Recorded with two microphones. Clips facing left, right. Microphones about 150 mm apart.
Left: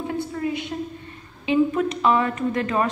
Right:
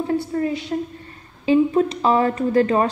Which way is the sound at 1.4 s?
35° right (ahead or behind).